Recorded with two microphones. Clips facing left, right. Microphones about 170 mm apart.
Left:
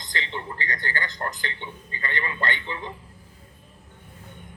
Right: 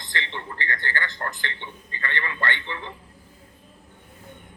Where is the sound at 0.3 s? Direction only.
15° left (ahead or behind).